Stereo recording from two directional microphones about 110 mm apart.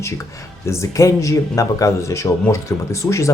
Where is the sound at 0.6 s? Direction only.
25° left (ahead or behind).